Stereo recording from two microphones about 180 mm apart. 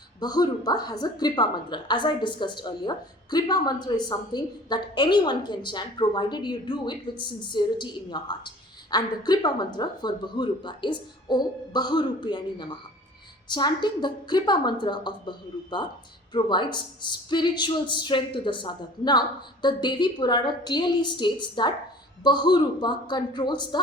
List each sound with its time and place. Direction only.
0.2 s a woman's voice: 20° left (ahead or behind)